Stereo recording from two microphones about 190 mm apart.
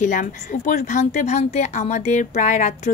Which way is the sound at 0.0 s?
40° left (ahead or behind).